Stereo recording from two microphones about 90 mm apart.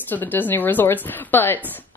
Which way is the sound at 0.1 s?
20° left (ahead or behind).